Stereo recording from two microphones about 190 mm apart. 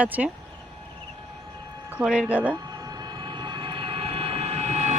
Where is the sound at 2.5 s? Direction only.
20° right (ahead or behind).